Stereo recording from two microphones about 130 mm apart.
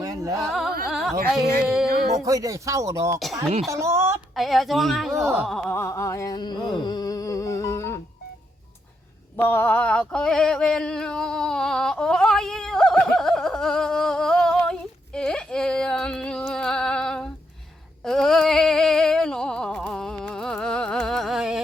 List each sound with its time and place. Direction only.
0.0 s carnatic music: 25° right (ahead or behind)
0.3 s carnatic music: centre (ahead or behind)
1.6 s speech: 5° right (ahead or behind)
2.2 s speech: 25° right (ahead or behind)
3.7 s a sound: 20° right (ahead or behind)
4.4 s speech: centre (ahead or behind)
5.1 s speech: 20° right (ahead or behind)
5.6 s a sound: 20° left (ahead or behind)
9.3 s a sound: 15° left (ahead or behind); by 21.6 s 5° right (ahead or behind)